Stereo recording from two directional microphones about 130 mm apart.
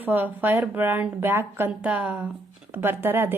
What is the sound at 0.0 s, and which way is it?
A woman's voice, 15° right (ahead or behind).